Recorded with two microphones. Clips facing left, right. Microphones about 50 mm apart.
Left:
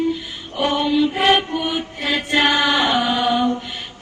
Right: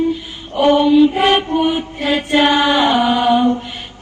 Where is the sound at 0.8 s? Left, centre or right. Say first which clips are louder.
Right 5 dB; right.